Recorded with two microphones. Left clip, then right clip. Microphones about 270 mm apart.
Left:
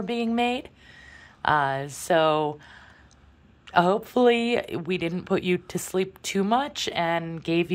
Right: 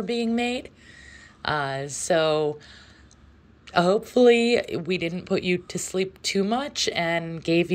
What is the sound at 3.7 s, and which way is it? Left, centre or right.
Speech, centre.